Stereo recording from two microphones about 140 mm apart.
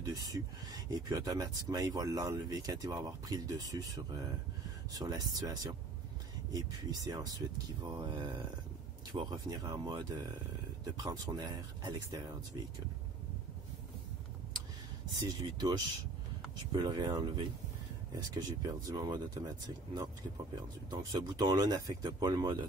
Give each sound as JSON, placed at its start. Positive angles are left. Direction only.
{"t": 0.0, "sound": "speech", "side_deg": -25}
{"t": 15.1, "sound": "speech", "side_deg": -30}